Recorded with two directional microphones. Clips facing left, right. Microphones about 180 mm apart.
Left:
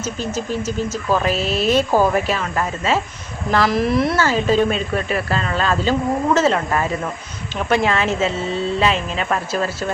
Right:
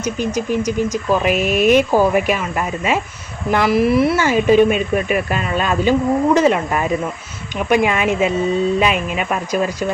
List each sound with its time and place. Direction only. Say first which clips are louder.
0.3 s speech: right 4 dB; 15° right (ahead or behind)